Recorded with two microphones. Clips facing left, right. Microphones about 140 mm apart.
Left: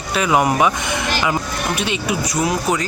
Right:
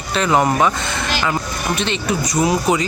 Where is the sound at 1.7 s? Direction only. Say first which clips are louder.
Right 2 dB; 10° left (ahead or behind).